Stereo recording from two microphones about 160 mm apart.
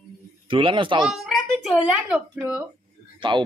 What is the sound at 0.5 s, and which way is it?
Speech, 30° right (ahead or behind).